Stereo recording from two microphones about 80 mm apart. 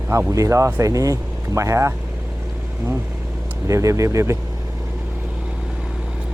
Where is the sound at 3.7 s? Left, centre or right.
Right.